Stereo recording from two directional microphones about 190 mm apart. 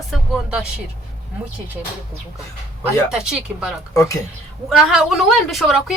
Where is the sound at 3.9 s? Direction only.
15° left (ahead or behind).